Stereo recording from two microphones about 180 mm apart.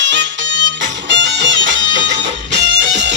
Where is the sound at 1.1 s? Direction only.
85° right.